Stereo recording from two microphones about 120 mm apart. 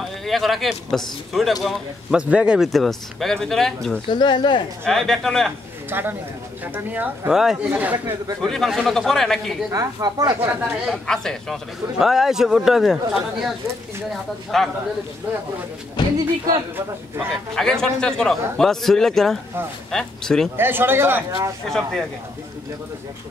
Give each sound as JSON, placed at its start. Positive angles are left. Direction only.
{"t": 0.2, "sound": "a man's voice", "side_deg": 0}
{"t": 4.1, "sound": "speech", "side_deg": 40}
{"t": 4.8, "sound": "a man's voice", "side_deg": 0}
{"t": 5.9, "sound": "speech", "side_deg": -15}
{"t": 8.4, "sound": "a man's voice", "side_deg": 5}
{"t": 9.7, "sound": "speech", "side_deg": -30}
{"t": 10.5, "sound": "speech", "side_deg": -15}
{"t": 10.9, "sound": "a man's voice", "side_deg": 5}
{"t": 16.0, "sound": "speech", "side_deg": 40}
{"t": 17.6, "sound": "a man's voice", "side_deg": 5}
{"t": 20.5, "sound": "speech", "side_deg": -20}
{"t": 21.6, "sound": "a man's voice", "side_deg": 5}